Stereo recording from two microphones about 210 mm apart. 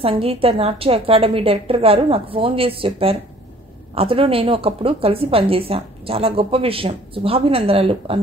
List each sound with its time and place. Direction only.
0.0 s a woman's voice: 25° right (ahead or behind)